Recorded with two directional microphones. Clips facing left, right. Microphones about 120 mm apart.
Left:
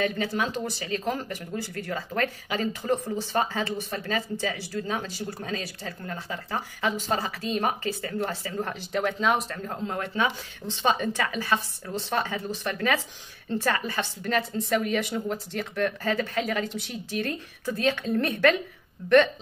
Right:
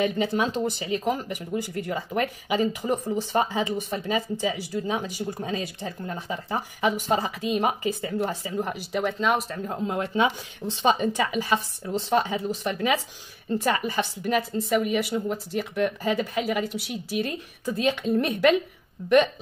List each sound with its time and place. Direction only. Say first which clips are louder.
0.0 s speech: right 3 dB; 25° right (ahead or behind); by 9.6 s centre (ahead or behind)
9.7 s speech: right 5 dB; 15° right (ahead or behind)